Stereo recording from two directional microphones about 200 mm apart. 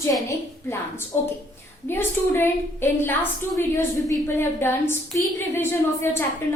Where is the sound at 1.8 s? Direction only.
10° left (ahead or behind).